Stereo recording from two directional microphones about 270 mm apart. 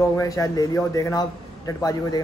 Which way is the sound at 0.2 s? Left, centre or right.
Centre.